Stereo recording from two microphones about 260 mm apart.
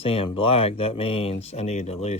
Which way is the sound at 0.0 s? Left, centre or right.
Left.